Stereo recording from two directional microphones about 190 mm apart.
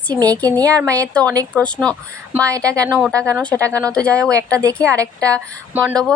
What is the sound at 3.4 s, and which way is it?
Speech, 5° left (ahead or behind).